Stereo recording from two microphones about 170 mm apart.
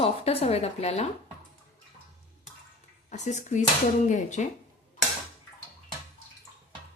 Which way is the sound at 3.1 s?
45° left (ahead or behind).